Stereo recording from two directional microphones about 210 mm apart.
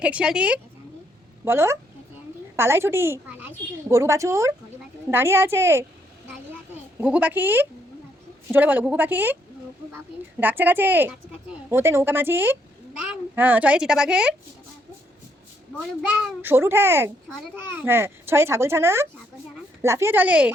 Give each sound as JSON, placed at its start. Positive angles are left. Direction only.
{"t": 0.0, "sound": "a woman's voice", "side_deg": -5}
{"t": 7.0, "sound": "a woman's voice", "side_deg": -10}
{"t": 10.4, "sound": "a woman's voice", "side_deg": -10}
{"t": 16.4, "sound": "a woman's voice", "side_deg": -10}